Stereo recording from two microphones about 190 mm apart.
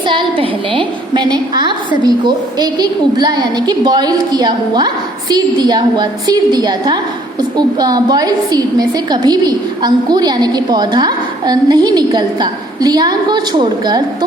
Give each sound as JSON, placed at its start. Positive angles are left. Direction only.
{"t": 0.0, "sound": "a woman's voice", "side_deg": -25}